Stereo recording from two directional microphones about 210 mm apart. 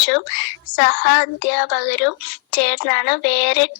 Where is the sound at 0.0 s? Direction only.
55° left (ahead or behind).